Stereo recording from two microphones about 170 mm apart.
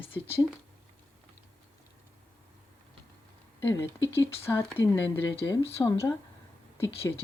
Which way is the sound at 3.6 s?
15° left (ahead or behind).